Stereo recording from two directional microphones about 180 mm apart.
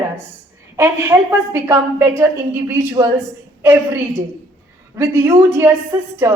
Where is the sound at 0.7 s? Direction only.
15° right (ahead or behind).